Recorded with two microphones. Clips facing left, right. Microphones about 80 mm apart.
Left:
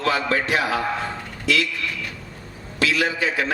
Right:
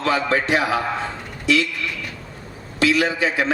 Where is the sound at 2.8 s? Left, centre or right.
Right.